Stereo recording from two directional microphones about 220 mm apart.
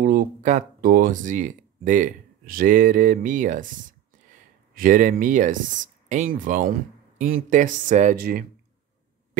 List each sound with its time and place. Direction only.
0.0 s speech: 40° right (ahead or behind)
4.7 s speech: 40° right (ahead or behind)